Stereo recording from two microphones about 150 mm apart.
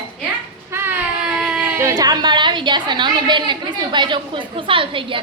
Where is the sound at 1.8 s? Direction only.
25° right (ahead or behind).